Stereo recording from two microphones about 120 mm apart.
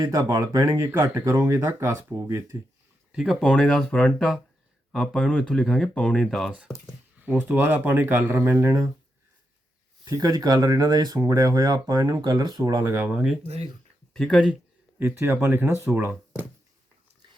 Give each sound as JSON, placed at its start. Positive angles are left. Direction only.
{"t": 0.0, "sound": "speech", "side_deg": -30}
{"t": 3.1, "sound": "speech", "side_deg": -5}
{"t": 7.3, "sound": "speech", "side_deg": -15}
{"t": 10.0, "sound": "speech", "side_deg": -30}
{"t": 12.7, "sound": "speech", "side_deg": -20}
{"t": 13.1, "sound": "speech", "side_deg": -10}
{"t": 14.1, "sound": "speech", "side_deg": 5}
{"t": 14.9, "sound": "speech", "side_deg": -20}